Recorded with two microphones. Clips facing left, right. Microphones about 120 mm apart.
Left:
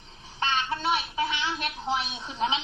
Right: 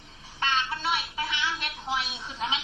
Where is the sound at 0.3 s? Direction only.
30° left (ahead or behind).